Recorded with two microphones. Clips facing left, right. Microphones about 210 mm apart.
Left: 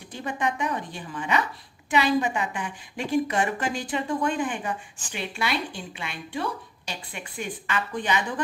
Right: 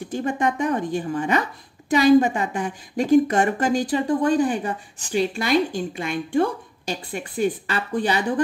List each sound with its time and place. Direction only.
0.1 s a woman's voice: 45° right (ahead or behind)